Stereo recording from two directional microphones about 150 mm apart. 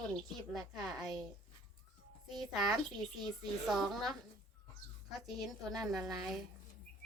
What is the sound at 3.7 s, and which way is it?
A woman's voice, centre (ahead or behind).